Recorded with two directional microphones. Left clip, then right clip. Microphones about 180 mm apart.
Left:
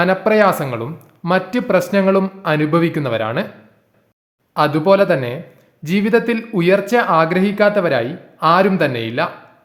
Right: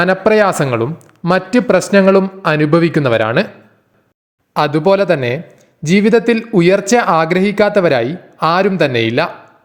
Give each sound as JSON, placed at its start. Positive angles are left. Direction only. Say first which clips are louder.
{"t": 0.0, "sound": "speech", "louder": "right 2 dB", "side_deg": -35}
{"t": 4.5, "sound": "speech", "louder": "right 1 dB", "side_deg": -30}